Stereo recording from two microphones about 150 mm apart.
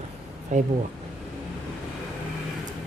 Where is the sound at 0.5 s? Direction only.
55° right (ahead or behind).